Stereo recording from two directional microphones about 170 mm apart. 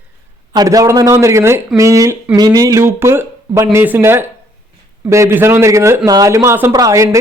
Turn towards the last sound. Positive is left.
turn(degrees=-20)  # may be behind; listen again after turning